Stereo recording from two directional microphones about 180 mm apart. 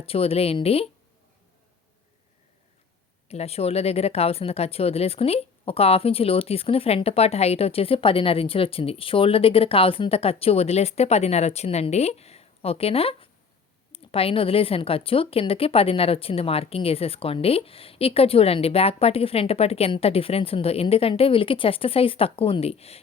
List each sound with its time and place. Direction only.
0.0 s speech: 30° left (ahead or behind)
3.2 s speech: 35° left (ahead or behind)